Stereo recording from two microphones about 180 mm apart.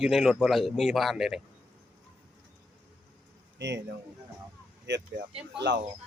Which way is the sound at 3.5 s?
75° right (ahead or behind).